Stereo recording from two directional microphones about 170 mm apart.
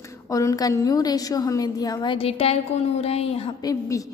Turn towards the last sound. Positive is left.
turn(degrees=20)  # may be behind; listen again after turning